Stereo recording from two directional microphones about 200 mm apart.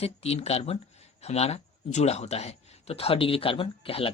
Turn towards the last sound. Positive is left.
turn(degrees=30)  # may be behind; listen again after turning